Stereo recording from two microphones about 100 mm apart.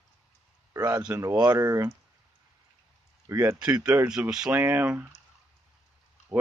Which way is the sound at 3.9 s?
25° right (ahead or behind).